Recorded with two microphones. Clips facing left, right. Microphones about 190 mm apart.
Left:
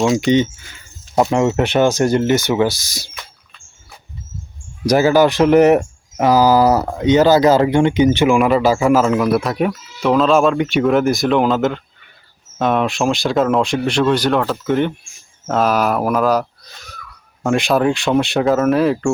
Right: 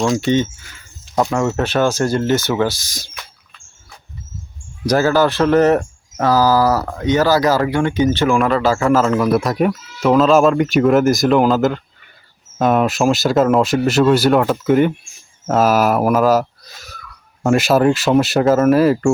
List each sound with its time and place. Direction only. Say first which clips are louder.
0.2 s speech: left 2 dB; 15° left (ahead or behind)
4.9 s speech: left 2 dB; 15° left (ahead or behind); by 19.1 s 5° right (ahead or behind)